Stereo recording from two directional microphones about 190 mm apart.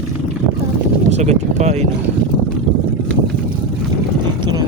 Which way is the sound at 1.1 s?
35° right (ahead or behind).